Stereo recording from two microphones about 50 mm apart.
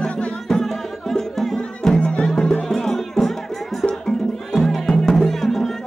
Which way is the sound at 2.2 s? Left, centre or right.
Centre.